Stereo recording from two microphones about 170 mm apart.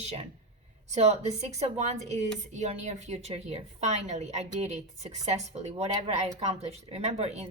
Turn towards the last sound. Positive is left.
turn(degrees=-40)  # may be behind; listen again after turning